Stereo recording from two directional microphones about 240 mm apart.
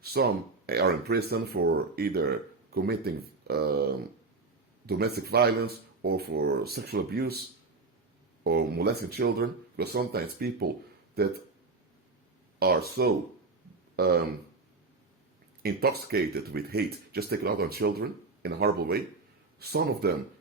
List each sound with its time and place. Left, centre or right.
0.0 s speech: right
8.4 s speech: right
12.5 s speech: right
15.6 s speech: right